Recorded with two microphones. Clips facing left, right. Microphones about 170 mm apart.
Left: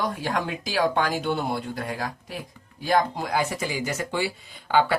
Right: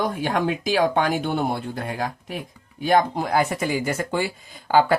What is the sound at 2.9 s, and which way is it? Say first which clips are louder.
Speech: right 4 dB; 45° right (ahead or behind).